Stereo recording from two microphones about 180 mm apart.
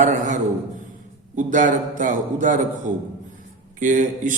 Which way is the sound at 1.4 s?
45° right (ahead or behind).